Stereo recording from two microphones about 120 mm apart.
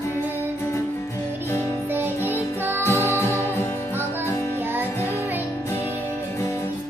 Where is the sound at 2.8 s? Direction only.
20° left (ahead or behind).